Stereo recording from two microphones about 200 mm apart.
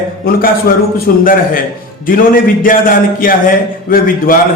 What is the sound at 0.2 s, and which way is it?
A man's voice, 50° left (ahead or behind).